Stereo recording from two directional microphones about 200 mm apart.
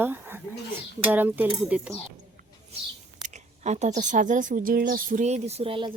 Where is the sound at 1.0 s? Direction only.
10° right (ahead or behind).